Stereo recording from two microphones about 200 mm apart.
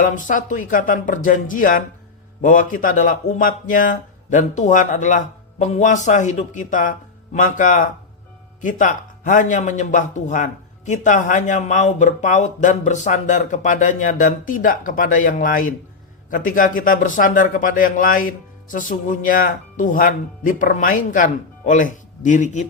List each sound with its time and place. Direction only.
0.0 s a man's voice: 40° left (ahead or behind)